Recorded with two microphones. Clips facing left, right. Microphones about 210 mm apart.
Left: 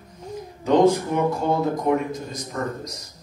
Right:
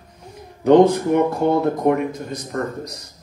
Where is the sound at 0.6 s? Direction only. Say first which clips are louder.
Right 5 dB; 60° right (ahead or behind).